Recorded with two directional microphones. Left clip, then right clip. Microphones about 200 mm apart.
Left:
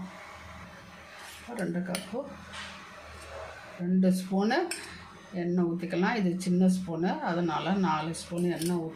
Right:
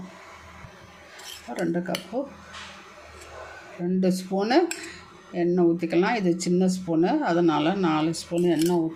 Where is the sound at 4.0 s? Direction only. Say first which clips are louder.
Right 3 dB; 45° right (ahead or behind).